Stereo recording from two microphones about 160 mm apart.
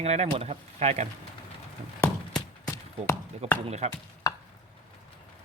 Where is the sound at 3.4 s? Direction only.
40° right (ahead or behind).